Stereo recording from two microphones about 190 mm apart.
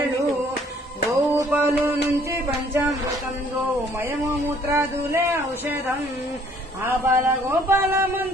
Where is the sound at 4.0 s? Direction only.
10° right (ahead or behind).